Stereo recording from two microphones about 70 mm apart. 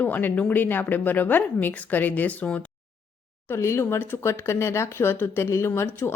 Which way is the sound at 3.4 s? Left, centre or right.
Left.